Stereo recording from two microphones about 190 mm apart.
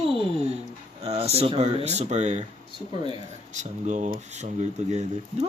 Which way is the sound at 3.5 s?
40° right (ahead or behind).